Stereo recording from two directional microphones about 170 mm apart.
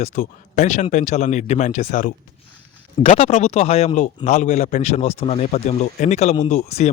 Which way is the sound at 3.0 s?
35° left (ahead or behind).